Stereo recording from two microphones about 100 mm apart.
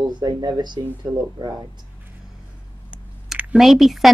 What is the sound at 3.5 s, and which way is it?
Speech, centre (ahead or behind).